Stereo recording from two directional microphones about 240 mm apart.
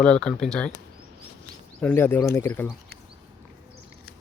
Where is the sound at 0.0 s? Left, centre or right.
Centre.